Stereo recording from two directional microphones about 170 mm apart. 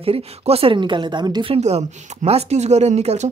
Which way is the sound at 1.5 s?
40° right (ahead or behind).